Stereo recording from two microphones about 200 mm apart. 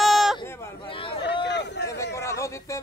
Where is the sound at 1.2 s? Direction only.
60° left (ahead or behind).